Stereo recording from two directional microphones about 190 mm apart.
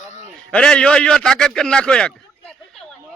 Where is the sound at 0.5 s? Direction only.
5° left (ahead or behind).